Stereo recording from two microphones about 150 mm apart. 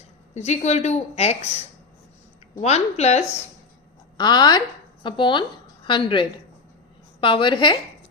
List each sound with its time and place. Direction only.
0.3 s a woman's voice: 50° left (ahead or behind)
4.2 s a woman's voice: 30° left (ahead or behind)